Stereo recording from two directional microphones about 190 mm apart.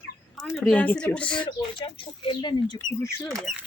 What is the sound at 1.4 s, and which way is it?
Speech, 25° left (ahead or behind).